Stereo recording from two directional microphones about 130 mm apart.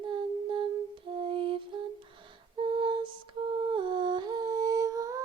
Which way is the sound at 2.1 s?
40° right (ahead or behind).